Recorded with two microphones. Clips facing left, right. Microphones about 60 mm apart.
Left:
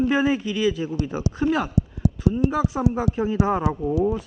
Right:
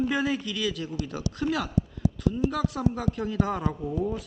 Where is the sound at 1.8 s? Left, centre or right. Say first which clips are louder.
Left 4 dB; left.